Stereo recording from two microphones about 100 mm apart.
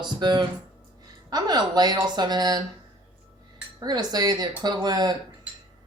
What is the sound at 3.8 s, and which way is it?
Speech, 40° right (ahead or behind).